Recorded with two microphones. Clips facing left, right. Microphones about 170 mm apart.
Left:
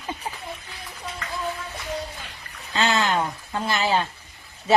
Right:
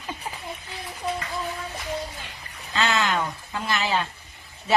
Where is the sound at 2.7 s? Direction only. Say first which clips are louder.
Left 2 dB; 30° left (ahead or behind).